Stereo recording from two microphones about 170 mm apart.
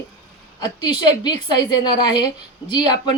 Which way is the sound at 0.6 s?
25° left (ahead or behind).